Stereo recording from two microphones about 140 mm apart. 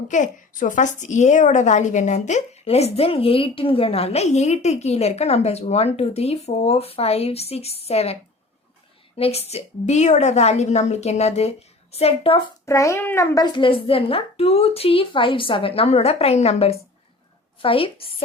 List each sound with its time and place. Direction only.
0.1 s a woman's voice: 65° left (ahead or behind); by 12.4 s 45° left (ahead or behind)
12.6 s a child's voice: 20° left (ahead or behind)
13.3 s a woman's voice: 35° left (ahead or behind)